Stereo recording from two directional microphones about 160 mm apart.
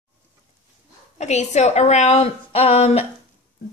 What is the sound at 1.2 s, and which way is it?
Speech, 45° left (ahead or behind).